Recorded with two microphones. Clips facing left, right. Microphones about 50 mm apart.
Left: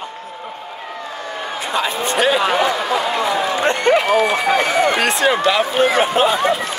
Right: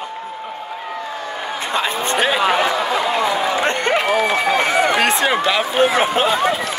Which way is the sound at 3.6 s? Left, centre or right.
Right.